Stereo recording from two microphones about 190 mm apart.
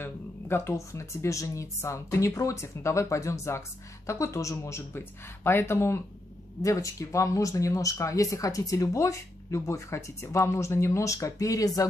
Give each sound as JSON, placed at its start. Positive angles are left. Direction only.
{"t": 0.0, "sound": "speech", "side_deg": 15}